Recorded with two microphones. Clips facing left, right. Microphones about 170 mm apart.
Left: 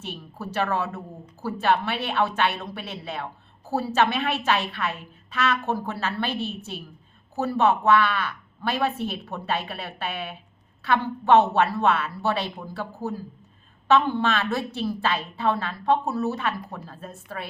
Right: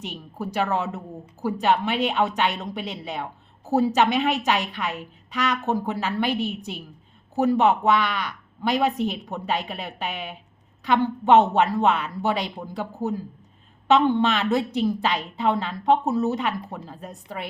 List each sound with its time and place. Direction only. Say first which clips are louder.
0.0 s a woman's voice: right 3 dB; 15° right (ahead or behind)